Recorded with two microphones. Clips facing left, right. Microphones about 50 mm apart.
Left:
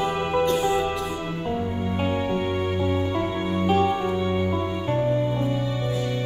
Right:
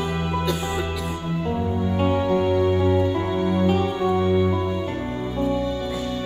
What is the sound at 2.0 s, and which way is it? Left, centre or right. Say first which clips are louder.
Music: right 5 dB; right.